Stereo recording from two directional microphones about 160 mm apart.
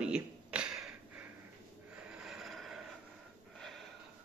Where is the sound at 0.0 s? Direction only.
5° right (ahead or behind).